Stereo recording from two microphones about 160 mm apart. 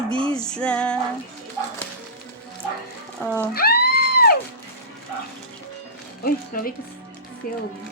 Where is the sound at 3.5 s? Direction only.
70° left (ahead or behind).